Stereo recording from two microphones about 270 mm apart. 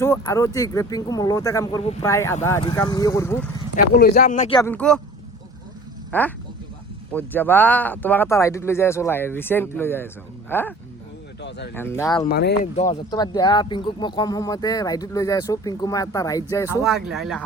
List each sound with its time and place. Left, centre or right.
0.0 s speech: centre
3.9 s speech: left
4.5 s speech: centre
6.1 s speech: centre
11.4 s speech: left
11.7 s speech: centre
12.2 s speech: left
12.7 s speech: centre
16.8 s speech: centre